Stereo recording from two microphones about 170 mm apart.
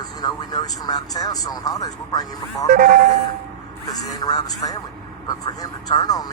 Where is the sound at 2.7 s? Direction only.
65° right (ahead or behind).